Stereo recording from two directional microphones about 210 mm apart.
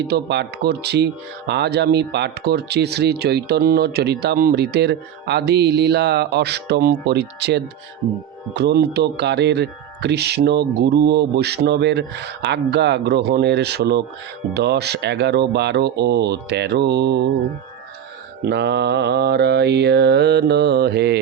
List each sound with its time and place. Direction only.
0.1 s speech: 50° right (ahead or behind)
18.4 s speech: 55° right (ahead or behind)